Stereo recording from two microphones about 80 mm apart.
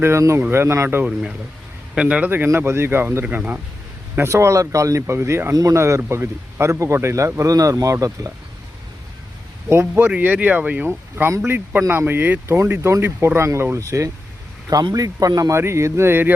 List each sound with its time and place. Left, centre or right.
0.0 s speech: right
1.0 s speech: centre
2.3 s speech: right
4.1 s speech: right
9.6 s speech: right
10.1 s speech: centre
10.8 s speech: right